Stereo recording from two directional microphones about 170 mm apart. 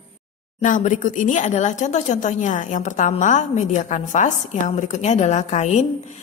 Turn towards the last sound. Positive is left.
turn(degrees=40)  # may be behind; listen again after turning